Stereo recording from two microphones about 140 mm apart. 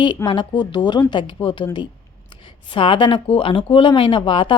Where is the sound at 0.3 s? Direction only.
35° left (ahead or behind).